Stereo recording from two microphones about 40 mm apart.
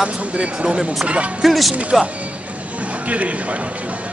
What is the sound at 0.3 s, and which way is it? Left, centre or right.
A man's voice, right.